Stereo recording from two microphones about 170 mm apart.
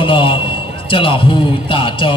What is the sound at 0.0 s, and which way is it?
A man's voice, 30° left (ahead or behind).